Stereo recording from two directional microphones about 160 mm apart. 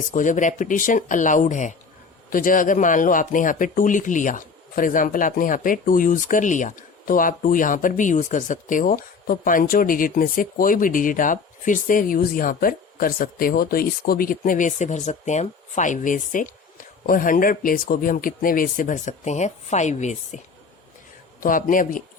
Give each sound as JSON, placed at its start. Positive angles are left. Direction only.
{"t": 0.1, "sound": "speech", "side_deg": 55}
{"t": 21.4, "sound": "speech", "side_deg": 60}